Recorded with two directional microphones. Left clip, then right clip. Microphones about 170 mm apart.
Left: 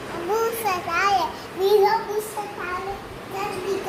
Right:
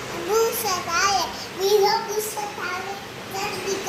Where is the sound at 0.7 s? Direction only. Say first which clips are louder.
Left 1 dB; 10° left (ahead or behind).